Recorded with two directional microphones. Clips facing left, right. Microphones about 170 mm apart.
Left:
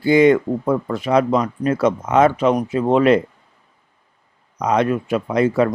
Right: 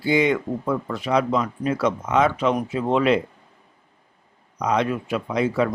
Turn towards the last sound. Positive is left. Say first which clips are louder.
# left 5 dB
turn(degrees=50)  # may be behind; listen again after turning